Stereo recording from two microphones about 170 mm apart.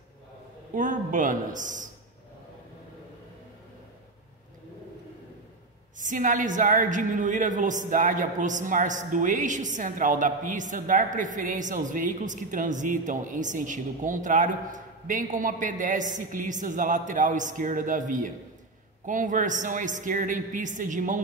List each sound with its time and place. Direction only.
0.7 s a woman's voice: 50° right (ahead or behind)
5.9 s a woman's voice: 50° right (ahead or behind)